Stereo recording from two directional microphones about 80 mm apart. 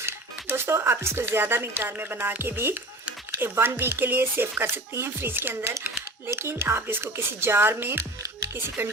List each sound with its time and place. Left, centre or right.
0.5 s speech: right